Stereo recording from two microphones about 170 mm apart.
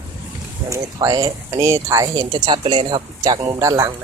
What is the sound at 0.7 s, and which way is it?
Speech, 20° right (ahead or behind).